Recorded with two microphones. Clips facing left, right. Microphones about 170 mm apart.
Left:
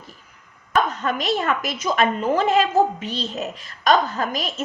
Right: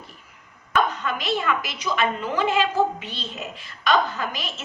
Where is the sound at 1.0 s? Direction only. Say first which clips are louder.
Left 3 dB; 40° left (ahead or behind).